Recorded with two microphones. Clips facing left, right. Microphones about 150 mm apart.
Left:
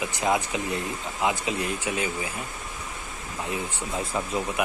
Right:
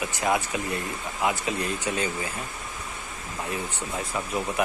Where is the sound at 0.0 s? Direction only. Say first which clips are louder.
Even; 20° left (ahead or behind).